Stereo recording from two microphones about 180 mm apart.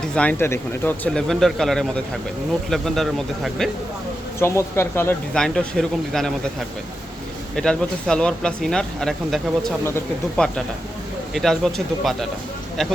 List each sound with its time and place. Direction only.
0.1 s speech: 5° left (ahead or behind)
4.4 s speech: 15° left (ahead or behind)
7.5 s speech: 5° left (ahead or behind)